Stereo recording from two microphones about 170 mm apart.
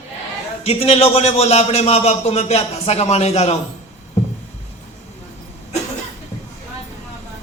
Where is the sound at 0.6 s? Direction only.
35° left (ahead or behind).